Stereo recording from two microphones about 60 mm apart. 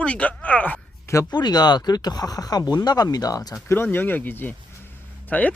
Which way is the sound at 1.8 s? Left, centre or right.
Left.